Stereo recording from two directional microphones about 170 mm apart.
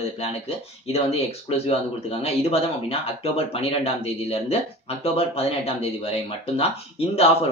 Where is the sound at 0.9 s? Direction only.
35° left (ahead or behind).